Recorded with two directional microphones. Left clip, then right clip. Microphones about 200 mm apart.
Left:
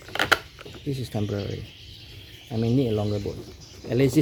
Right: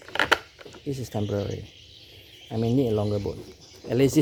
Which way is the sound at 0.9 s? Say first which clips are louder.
Right 1 dB; 10° right (ahead or behind).